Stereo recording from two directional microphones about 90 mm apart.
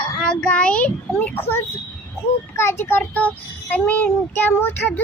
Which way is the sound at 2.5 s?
30° left (ahead or behind).